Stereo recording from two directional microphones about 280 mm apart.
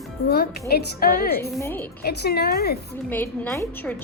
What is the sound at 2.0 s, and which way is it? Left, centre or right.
Speech, left.